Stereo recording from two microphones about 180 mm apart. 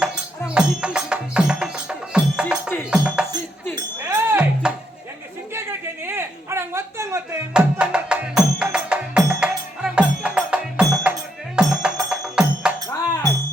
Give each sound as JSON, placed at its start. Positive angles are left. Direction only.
{"t": 0.0, "sound": "music", "side_deg": -5}
{"t": 3.8, "sound": "music", "side_deg": -20}
{"t": 5.5, "sound": "a sound", "side_deg": -15}
{"t": 7.5, "sound": "music", "side_deg": -5}
{"t": 12.9, "sound": "music", "side_deg": 15}